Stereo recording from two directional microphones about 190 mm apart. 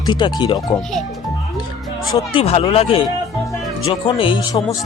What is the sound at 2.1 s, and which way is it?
Speech, 30° left (ahead or behind).